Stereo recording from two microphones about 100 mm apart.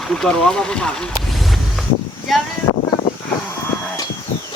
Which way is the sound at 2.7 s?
50° left (ahead or behind).